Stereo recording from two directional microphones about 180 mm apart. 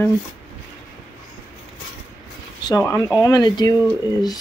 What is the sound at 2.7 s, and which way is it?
Speech, 20° left (ahead or behind).